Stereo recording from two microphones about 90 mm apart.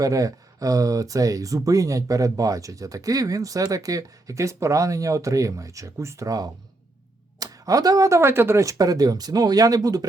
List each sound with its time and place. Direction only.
0.0 s speech: 40° right (ahead or behind)